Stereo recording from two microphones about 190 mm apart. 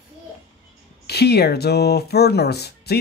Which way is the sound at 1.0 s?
60° left (ahead or behind).